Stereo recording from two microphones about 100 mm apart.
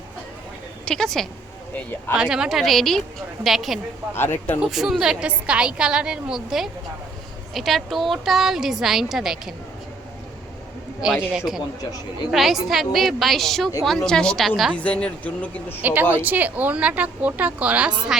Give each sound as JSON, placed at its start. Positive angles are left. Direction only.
{"t": 0.9, "sound": "a woman's voice", "side_deg": 5}
{"t": 1.7, "sound": "speech", "side_deg": 20}
{"t": 2.1, "sound": "a woman's voice", "side_deg": -10}
{"t": 4.1, "sound": "speech", "side_deg": 20}
{"t": 4.6, "sound": "a woman's voice", "side_deg": -5}
{"t": 11.0, "sound": "a woman's voice", "side_deg": -5}
{"t": 14.8, "sound": "speech", "side_deg": 10}
{"t": 15.8, "sound": "a woman's voice", "side_deg": -20}